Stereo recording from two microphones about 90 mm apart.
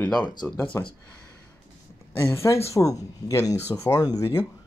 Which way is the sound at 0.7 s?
35° left (ahead or behind).